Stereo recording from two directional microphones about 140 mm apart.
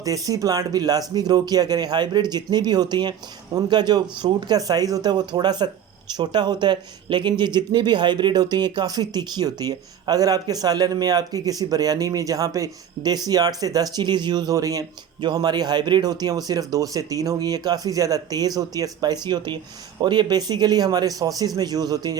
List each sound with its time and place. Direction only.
0.0 s speech: 25° right (ahead or behind)